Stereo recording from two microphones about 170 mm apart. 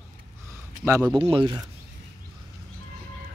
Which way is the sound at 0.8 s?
15° right (ahead or behind).